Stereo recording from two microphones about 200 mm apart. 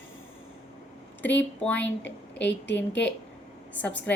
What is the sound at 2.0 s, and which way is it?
Speech, 60° left (ahead or behind).